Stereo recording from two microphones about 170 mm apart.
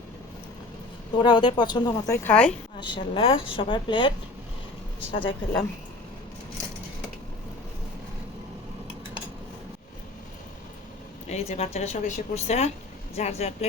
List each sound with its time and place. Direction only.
1.2 s speech: 30° left (ahead or behind); by 2.5 s 10° left (ahead or behind)
2.8 s speech: 30° left (ahead or behind)
11.3 s speech: 40° left (ahead or behind)